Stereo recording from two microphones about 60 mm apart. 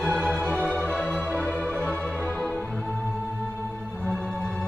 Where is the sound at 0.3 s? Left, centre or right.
Left.